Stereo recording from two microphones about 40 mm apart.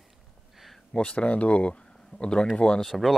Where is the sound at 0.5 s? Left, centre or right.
Centre.